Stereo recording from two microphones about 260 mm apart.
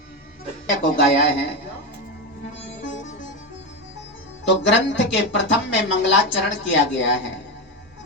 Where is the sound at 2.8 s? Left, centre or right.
Left.